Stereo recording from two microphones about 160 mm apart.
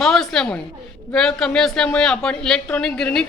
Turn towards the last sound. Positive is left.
turn(degrees=5)  # may be behind; listen again after turning